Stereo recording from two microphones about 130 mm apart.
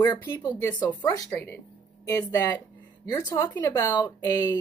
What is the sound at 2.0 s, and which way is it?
Speech, 25° left (ahead or behind).